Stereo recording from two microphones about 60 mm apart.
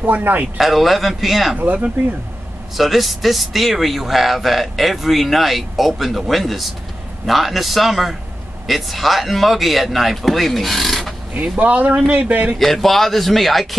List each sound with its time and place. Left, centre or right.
0.0 s speech: right
0.6 s speech: centre
1.6 s speech: right
2.8 s speech: centre
11.3 s speech: right
12.5 s speech: centre